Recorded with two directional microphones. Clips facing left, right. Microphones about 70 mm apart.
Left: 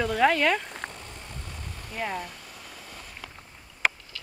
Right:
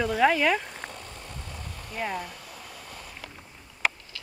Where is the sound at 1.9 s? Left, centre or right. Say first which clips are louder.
Even; centre.